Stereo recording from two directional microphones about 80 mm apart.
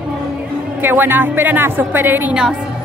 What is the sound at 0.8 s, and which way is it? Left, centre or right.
A woman's voice, right.